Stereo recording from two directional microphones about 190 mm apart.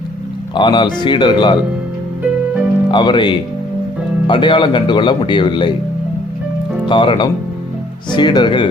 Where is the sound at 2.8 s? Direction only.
25° left (ahead or behind).